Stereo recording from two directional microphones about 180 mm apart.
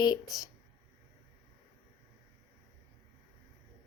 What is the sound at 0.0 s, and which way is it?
Speech, 20° left (ahead or behind).